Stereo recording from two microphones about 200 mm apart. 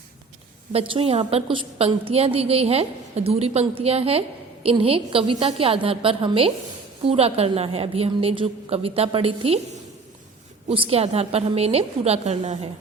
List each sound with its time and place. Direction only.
0.7 s a woman's voice: 30° right (ahead or behind)
10.7 s a woman's voice: 30° right (ahead or behind)